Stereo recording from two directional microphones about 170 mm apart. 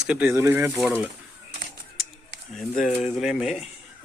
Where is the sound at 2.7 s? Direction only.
50° left (ahead or behind).